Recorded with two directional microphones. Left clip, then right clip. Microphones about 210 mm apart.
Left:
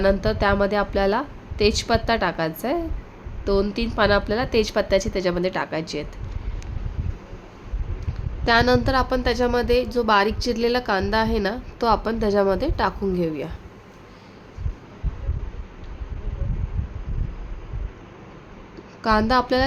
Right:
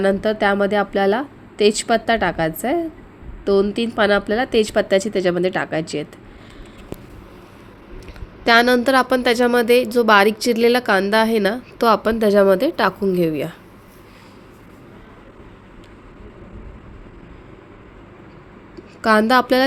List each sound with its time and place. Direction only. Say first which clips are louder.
0.0 s a woman's voice: right 3 dB; 10° right (ahead or behind)
8.4 s a woman's voice: right 5 dB; 10° right (ahead or behind)
19.0 s a woman's voice: right 5 dB; 15° right (ahead or behind)